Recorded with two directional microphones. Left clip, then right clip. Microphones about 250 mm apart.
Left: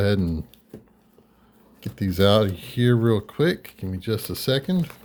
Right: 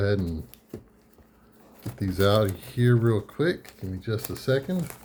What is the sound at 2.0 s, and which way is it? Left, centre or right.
Speech, left.